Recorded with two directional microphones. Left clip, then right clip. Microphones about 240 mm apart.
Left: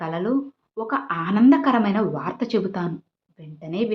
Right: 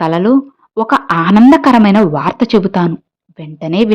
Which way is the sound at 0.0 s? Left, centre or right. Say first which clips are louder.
Right 13 dB; right.